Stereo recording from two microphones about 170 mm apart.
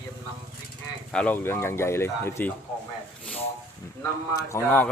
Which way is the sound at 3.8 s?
15° left (ahead or behind).